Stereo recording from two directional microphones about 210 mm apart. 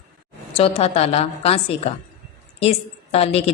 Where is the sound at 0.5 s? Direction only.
30° left (ahead or behind).